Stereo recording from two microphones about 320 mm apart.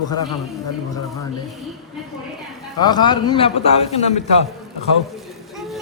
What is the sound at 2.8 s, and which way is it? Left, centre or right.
A man's voice, centre.